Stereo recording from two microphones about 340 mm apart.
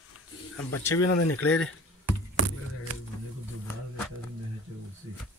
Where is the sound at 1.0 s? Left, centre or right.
Left.